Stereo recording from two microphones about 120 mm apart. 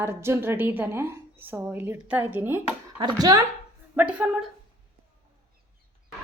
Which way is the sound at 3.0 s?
35° right (ahead or behind).